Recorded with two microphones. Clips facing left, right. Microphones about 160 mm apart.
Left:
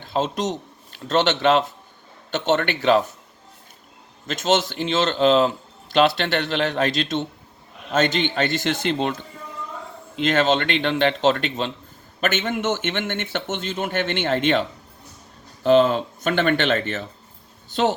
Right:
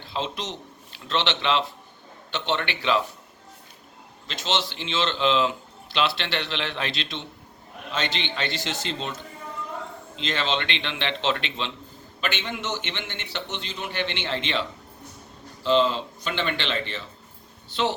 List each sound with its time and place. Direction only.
0.0 s a man's voice: 45° left (ahead or behind)
4.3 s a man's voice: 45° left (ahead or behind)
10.2 s a man's voice: 50° left (ahead or behind)